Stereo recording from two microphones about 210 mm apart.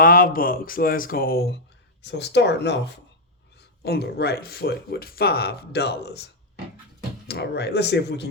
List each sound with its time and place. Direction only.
0.0 s speech: 45° left (ahead or behind)